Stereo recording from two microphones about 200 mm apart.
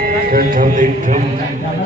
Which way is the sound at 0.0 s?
45° right (ahead or behind).